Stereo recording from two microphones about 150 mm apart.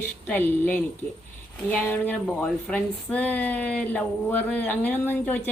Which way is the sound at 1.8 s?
10° left (ahead or behind).